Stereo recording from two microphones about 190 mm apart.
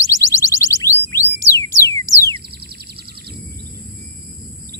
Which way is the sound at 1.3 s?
15° left (ahead or behind).